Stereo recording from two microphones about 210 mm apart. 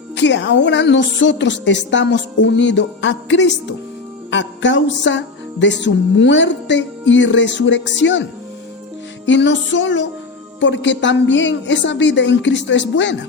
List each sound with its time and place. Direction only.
0.2 s music: 55° left (ahead or behind)